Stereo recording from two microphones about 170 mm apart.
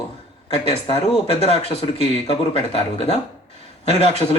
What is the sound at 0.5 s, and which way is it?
Speech, 35° left (ahead or behind).